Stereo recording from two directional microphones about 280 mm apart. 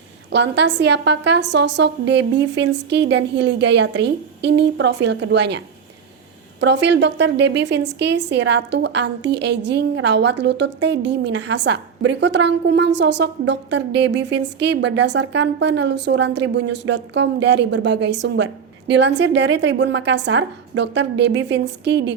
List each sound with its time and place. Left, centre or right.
0.3 s a woman's voice: right